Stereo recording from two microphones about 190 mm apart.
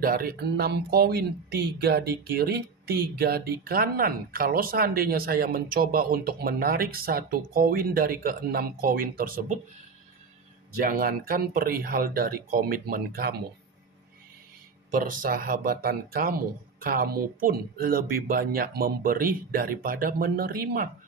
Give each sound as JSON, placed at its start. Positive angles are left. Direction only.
{"t": 0.0, "sound": "speech", "side_deg": -50}
{"t": 10.8, "sound": "speech", "side_deg": -50}
{"t": 14.9, "sound": "speech", "side_deg": -45}